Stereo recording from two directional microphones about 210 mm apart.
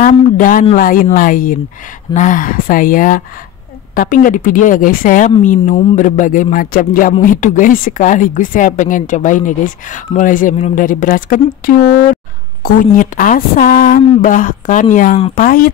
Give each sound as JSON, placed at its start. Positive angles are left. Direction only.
{"t": 0.0, "sound": "a man's voice", "side_deg": 40}